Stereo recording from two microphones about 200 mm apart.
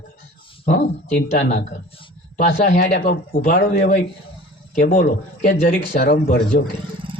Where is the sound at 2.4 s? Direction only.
40° left (ahead or behind).